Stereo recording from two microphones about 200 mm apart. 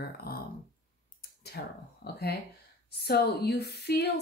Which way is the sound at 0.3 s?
50° left (ahead or behind).